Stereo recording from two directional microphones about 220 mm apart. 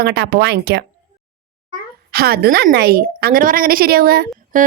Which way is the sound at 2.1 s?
45° right (ahead or behind).